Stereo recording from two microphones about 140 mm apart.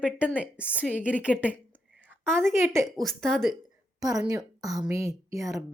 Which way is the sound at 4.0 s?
25° right (ahead or behind).